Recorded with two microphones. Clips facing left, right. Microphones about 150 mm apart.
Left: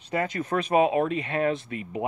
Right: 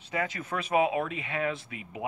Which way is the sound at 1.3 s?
45° left (ahead or behind).